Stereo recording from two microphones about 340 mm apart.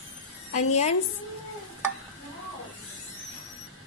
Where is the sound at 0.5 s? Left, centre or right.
Centre.